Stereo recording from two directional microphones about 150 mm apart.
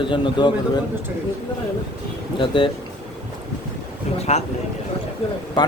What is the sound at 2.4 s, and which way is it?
Speech, 35° left (ahead or behind).